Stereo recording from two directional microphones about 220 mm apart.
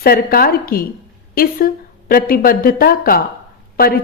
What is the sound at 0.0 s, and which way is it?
A woman's voice, 45° left (ahead or behind).